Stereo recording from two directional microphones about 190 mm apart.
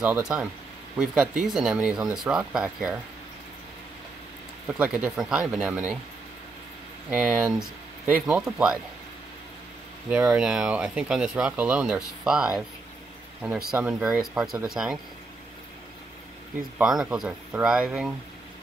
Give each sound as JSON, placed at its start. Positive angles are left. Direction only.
{"t": 0.0, "sound": "speech", "side_deg": -10}
{"t": 4.6, "sound": "speech", "side_deg": -5}
{"t": 7.1, "sound": "speech", "side_deg": -5}
{"t": 10.0, "sound": "speech", "side_deg": -5}
{"t": 16.7, "sound": "speech", "side_deg": -5}